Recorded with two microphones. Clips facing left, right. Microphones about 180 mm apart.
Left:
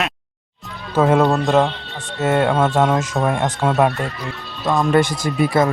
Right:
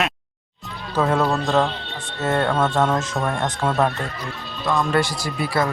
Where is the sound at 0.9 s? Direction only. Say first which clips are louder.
Left 5 dB; 20° left (ahead or behind).